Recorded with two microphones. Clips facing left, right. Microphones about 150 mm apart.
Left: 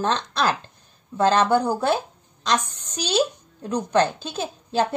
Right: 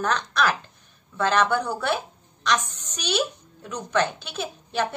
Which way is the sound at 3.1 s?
35° left (ahead or behind).